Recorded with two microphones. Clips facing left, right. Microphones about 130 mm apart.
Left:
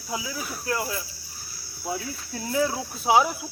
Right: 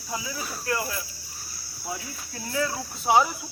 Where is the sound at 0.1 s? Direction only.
5° left (ahead or behind).